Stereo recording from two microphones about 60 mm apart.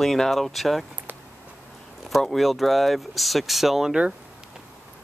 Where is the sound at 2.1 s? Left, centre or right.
Centre.